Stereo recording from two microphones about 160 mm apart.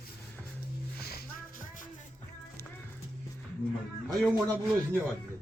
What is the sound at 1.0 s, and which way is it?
Music, 75° left (ahead or behind).